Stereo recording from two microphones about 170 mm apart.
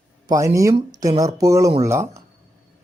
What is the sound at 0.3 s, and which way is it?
Speech, 20° right (ahead or behind).